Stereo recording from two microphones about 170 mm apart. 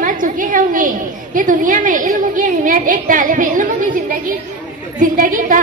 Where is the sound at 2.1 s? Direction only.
50° right (ahead or behind).